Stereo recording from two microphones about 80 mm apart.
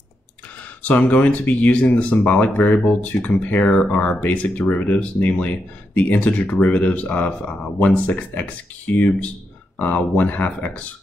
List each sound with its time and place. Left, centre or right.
0.8 s speech: centre